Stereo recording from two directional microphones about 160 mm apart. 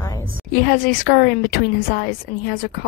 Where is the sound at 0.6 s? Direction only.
60° left (ahead or behind).